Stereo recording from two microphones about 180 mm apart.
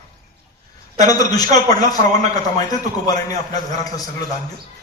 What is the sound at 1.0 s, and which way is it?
Speech, 20° left (ahead or behind).